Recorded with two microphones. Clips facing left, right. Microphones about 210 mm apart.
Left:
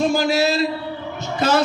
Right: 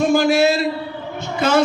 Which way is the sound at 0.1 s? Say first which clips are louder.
Right 4 dB; 50° right (ahead or behind).